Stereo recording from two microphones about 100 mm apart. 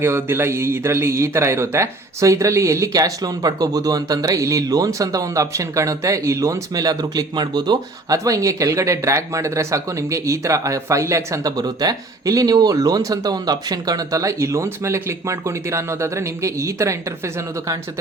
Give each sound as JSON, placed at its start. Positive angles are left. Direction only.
{"t": 0.0, "sound": "speech", "side_deg": -25}